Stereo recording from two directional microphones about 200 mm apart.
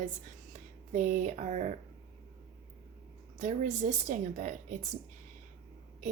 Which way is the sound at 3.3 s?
40° right (ahead or behind).